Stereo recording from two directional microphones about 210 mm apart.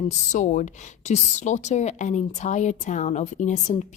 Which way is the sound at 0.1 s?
35° left (ahead or behind).